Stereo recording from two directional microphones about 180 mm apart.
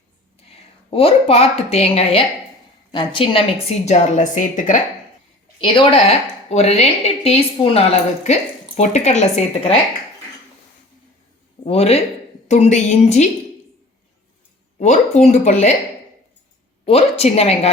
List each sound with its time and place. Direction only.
0.9 s a woman's voice: 35° left (ahead or behind)
5.5 s a woman's voice: 25° left (ahead or behind)
11.6 s a woman's voice: 35° left (ahead or behind)
14.8 s a woman's voice: 40° left (ahead or behind)
16.8 s a woman's voice: 35° left (ahead or behind)